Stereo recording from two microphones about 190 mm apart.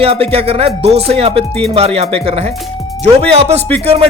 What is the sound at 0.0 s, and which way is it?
Speech, 30° right (ahead or behind).